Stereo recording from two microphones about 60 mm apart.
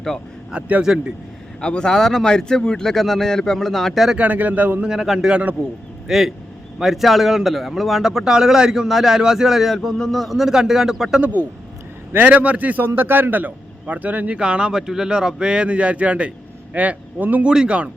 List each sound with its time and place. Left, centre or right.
0.5 s speech: centre
1.6 s speech: centre
4.2 s a man's voice: right
4.9 s a man's voice: centre
11.2 s a man's voice: right
17.4 s speech: centre